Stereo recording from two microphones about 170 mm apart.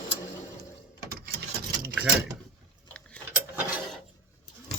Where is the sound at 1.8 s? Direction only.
5° right (ahead or behind).